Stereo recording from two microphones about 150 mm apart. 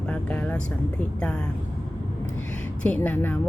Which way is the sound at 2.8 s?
10° left (ahead or behind).